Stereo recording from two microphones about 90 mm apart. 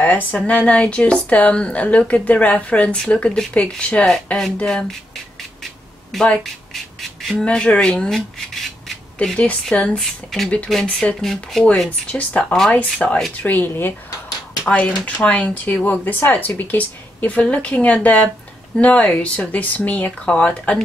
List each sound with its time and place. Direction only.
0.0 s speech: 20° left (ahead or behind)
6.1 s speech: 5° left (ahead or behind)